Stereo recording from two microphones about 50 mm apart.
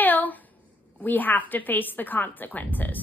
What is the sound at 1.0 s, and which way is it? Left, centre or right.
A woman's voice, left.